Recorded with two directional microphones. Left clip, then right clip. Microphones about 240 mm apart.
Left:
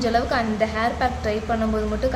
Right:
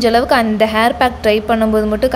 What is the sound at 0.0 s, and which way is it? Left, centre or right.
A woman's voice, right.